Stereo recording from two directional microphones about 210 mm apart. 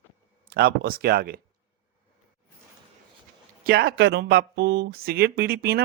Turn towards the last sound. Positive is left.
turn(degrees=-50)  # may be behind; listen again after turning